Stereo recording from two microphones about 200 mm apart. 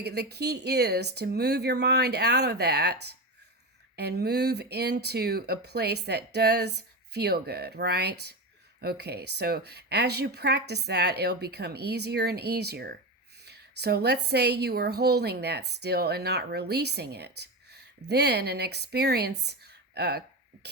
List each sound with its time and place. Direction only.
0.0 s a woman's voice: 55° right (ahead or behind)